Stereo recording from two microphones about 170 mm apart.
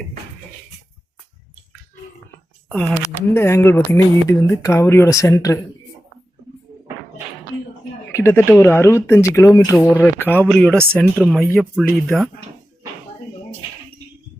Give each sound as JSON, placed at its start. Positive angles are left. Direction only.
{"t": 2.6, "sound": "speech", "side_deg": 5}
{"t": 8.1, "sound": "speech", "side_deg": 15}